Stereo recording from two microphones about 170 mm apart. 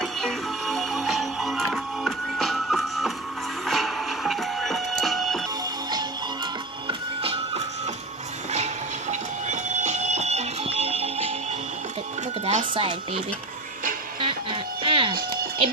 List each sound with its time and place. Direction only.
0.0 s music: centre (ahead or behind)
5.9 s music: 25° right (ahead or behind)
8.5 s train: 40° right (ahead or behind)
12.5 s speech: 35° right (ahead or behind)
14.2 s music: 30° right (ahead or behind)